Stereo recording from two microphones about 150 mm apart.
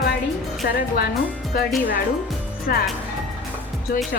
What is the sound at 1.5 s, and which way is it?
Speech, 75° left (ahead or behind).